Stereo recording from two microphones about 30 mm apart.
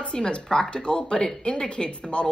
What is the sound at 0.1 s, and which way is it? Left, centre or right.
Speech, left.